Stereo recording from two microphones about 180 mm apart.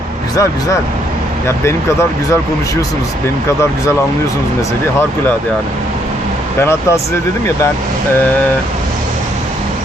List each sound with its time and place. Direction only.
1.5 s speech: 15° left (ahead or behind)
6.6 s speech: 15° left (ahead or behind)